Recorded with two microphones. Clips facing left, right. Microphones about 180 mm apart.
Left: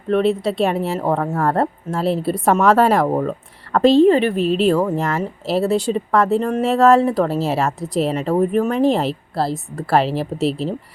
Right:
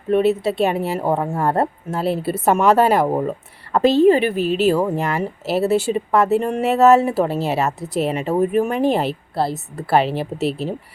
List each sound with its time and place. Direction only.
0.1 s speech: 5° right (ahead or behind)
1.3 s speech: 25° right (ahead or behind)
1.5 s a woman's voice: centre (ahead or behind)